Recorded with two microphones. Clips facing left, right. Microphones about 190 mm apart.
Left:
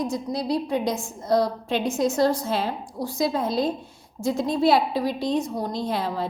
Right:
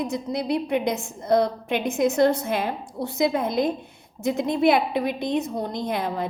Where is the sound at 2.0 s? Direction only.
60° right (ahead or behind).